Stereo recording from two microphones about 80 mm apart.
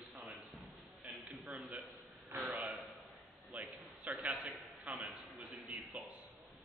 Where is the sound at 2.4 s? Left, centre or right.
Centre.